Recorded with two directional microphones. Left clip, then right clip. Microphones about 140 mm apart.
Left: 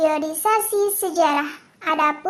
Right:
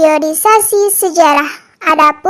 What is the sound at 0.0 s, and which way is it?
Speech, 40° right (ahead or behind).